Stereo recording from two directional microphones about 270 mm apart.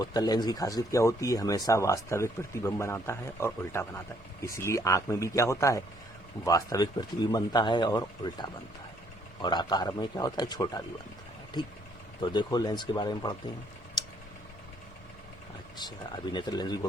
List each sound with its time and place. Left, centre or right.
0.0 s speech: centre
12.2 s speech: centre
15.8 s speech: centre